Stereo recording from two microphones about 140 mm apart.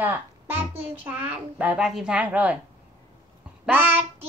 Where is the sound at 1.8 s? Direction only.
5° right (ahead or behind).